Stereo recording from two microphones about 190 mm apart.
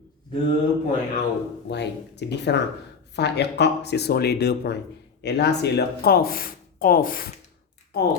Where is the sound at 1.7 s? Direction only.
65° left (ahead or behind).